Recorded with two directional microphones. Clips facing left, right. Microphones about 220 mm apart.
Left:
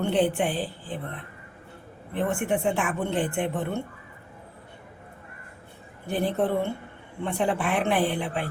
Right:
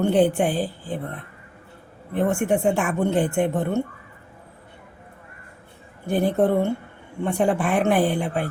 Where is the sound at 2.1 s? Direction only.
45° right (ahead or behind).